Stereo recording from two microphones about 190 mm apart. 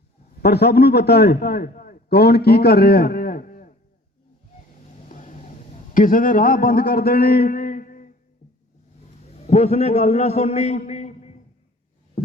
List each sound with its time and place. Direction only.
0.4 s a man's voice: 60° left (ahead or behind)
5.0 s a sound: 40° left (ahead or behind)
9.5 s a man's voice: 35° left (ahead or behind)